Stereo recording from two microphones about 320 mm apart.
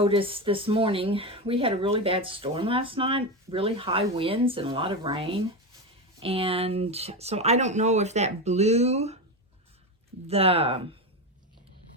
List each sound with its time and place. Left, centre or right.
0.0 s speech: centre
10.2 s speech: centre